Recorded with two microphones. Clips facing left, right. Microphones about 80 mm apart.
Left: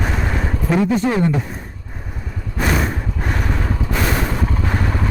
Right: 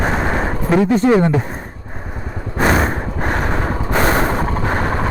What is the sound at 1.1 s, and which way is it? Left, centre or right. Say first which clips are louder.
Speech: right 5 dB; right.